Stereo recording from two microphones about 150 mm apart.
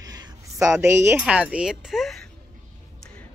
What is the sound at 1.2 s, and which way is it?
A woman's voice, 10° right (ahead or behind).